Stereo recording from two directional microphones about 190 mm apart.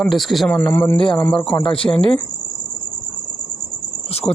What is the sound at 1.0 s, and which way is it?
Speech, 25° left (ahead or behind).